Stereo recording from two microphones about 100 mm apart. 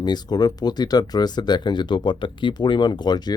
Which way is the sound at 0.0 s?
45° left (ahead or behind).